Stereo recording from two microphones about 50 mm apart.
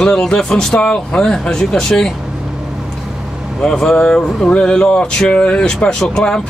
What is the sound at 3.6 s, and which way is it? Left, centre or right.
Speech, centre.